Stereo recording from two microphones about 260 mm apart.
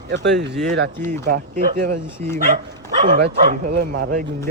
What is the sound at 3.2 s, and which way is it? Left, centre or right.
Speech, right.